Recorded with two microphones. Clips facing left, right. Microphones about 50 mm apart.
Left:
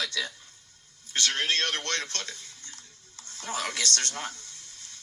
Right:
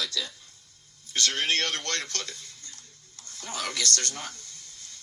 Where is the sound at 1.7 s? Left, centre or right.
Left.